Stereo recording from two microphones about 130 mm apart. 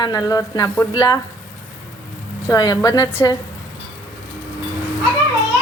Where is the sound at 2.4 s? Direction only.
30° left (ahead or behind).